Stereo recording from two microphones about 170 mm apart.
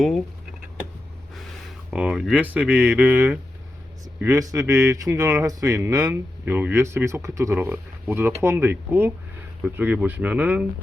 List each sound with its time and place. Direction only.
1.9 s speech: 5° right (ahead or behind)
4.2 s speech: 20° right (ahead or behind)